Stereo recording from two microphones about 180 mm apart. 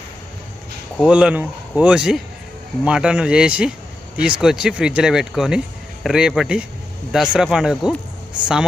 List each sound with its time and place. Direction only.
0.9 s speech: 5° right (ahead or behind)